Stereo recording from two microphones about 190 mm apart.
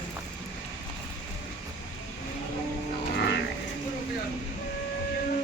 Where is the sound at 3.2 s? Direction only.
65° left (ahead or behind).